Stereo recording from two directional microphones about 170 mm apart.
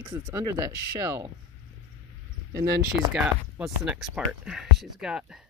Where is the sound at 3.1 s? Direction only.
5° right (ahead or behind).